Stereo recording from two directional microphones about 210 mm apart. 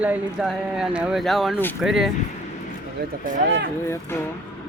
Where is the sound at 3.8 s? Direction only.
10° left (ahead or behind).